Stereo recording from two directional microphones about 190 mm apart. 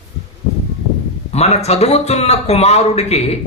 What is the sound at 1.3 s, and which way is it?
A man's voice, 35° left (ahead or behind).